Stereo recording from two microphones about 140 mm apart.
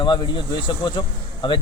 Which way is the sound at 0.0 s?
35° left (ahead or behind).